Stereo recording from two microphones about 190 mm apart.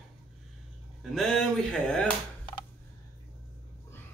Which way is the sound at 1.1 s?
Centre (ahead or behind).